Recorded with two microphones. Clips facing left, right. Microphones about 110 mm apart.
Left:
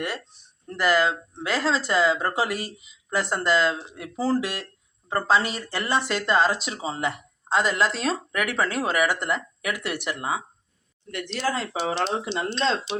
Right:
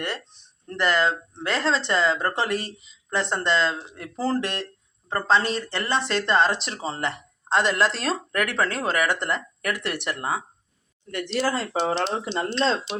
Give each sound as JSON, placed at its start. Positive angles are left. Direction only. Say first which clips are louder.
{"t": 0.7, "sound": "speech", "louder": "left 1 dB", "side_deg": 5}
{"t": 12.0, "sound": "speech", "louder": "even", "side_deg": -25}